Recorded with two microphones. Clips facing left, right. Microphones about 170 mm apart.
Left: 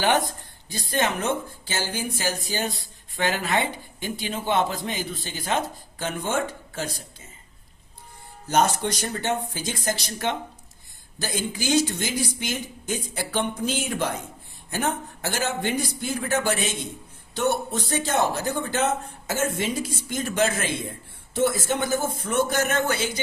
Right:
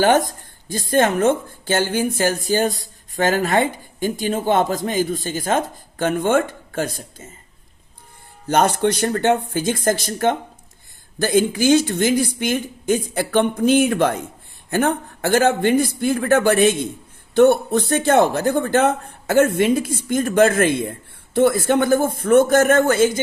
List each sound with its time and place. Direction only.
0.0 s speech: 45° right (ahead or behind)
8.4 s speech: 60° right (ahead or behind)